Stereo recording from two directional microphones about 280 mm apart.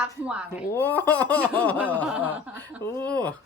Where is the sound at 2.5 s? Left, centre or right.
Centre.